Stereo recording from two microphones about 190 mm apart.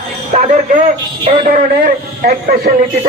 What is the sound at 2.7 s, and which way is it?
Speech, 55° right (ahead or behind).